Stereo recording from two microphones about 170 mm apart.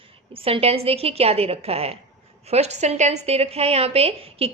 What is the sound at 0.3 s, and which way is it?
A woman's voice, 35° right (ahead or behind).